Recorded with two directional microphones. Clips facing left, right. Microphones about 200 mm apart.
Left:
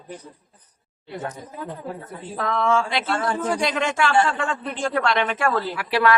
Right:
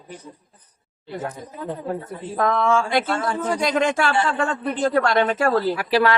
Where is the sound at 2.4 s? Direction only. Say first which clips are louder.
Right 2 dB; 45° right (ahead or behind).